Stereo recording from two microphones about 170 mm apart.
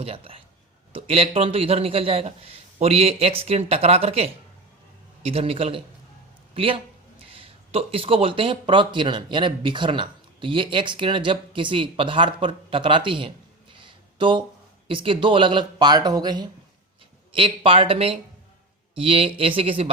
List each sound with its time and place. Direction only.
0.0 s a man's voice: 35° right (ahead or behind)